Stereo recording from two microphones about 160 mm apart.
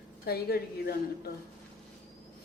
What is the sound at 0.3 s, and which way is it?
A woman's voice, 75° left (ahead or behind).